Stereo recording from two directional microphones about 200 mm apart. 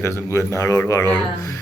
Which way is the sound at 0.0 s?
15° left (ahead or behind).